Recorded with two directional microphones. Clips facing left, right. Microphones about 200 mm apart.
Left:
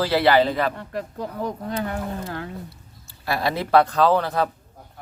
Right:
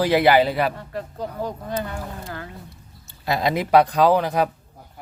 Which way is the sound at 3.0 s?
20° right (ahead or behind).